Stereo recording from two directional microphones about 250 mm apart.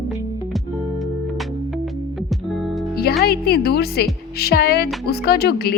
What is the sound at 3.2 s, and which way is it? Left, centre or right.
A woman's voice, left.